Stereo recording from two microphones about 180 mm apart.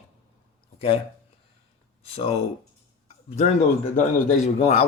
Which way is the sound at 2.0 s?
30° left (ahead or behind).